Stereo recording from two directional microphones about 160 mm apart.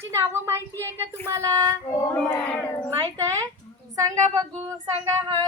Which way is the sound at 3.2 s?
20° right (ahead or behind).